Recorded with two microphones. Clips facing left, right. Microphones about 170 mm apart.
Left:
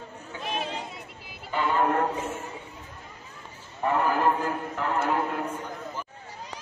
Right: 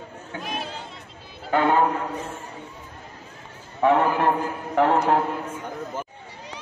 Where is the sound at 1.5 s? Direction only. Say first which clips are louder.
Right 7 dB; 65° right (ahead or behind).